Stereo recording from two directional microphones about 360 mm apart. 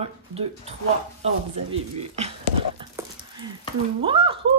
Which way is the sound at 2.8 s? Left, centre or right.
Centre.